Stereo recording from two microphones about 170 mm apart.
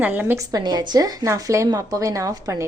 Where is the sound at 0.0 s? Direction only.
10° right (ahead or behind).